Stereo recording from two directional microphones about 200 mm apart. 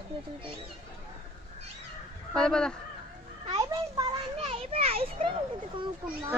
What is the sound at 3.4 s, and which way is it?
Children playing, 20° right (ahead or behind).